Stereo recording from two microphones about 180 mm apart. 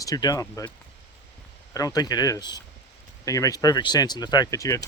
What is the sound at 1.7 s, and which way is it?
Speech, 20° left (ahead or behind).